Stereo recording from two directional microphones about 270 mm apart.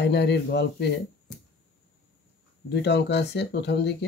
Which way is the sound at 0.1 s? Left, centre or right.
Left.